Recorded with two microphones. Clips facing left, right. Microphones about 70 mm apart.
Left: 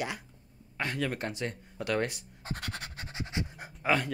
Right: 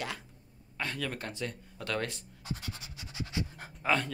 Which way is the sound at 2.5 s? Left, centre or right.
Left.